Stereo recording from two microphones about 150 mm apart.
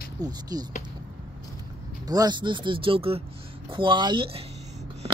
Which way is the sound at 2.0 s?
25° right (ahead or behind).